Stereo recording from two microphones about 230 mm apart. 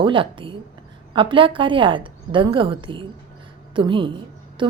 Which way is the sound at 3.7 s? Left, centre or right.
Right.